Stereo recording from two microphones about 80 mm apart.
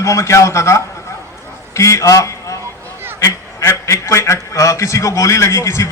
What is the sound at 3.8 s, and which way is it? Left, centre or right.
A man's voice, left.